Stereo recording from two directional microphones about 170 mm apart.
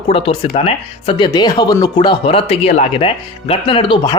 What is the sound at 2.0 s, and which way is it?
Speech, 35° left (ahead or behind).